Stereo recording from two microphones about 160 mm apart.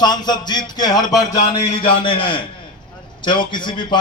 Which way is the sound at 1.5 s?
35° left (ahead or behind).